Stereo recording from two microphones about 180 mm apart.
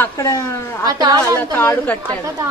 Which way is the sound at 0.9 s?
20° right (ahead or behind).